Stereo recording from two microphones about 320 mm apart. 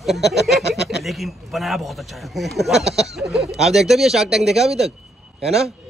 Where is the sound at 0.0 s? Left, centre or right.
Centre.